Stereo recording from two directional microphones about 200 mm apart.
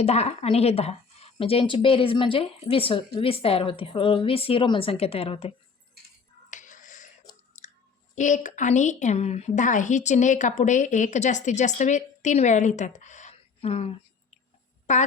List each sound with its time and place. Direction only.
0.0 s speech: 30° left (ahead or behind)
6.5 s music: 40° left (ahead or behind)
7.6 s chewing: 35° left (ahead or behind)
8.1 s a woman's voice: 40° left (ahead or behind)